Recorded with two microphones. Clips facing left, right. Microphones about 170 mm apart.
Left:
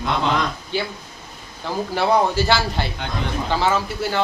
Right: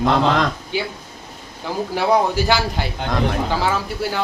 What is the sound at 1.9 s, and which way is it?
Speech, 10° right (ahead or behind).